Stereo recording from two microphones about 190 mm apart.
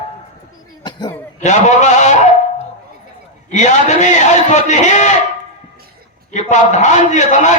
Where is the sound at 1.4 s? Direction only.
40° left (ahead or behind).